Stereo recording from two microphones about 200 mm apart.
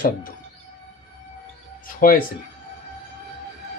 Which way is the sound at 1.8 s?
45° left (ahead or behind).